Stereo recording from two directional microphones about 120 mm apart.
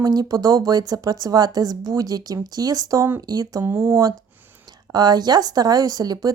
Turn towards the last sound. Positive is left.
turn(degrees=-30)  # may be behind; listen again after turning